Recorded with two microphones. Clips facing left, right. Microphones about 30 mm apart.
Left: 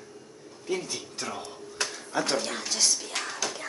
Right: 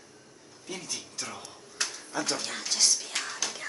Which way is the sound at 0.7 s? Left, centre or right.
Centre.